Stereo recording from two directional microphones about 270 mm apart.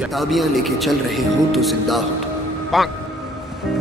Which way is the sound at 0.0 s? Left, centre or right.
Centre.